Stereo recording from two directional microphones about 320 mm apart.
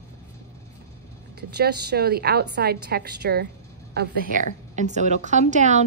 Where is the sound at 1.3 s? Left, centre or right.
Right.